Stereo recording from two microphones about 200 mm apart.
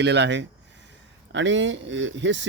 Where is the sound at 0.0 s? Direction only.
60° right (ahead or behind).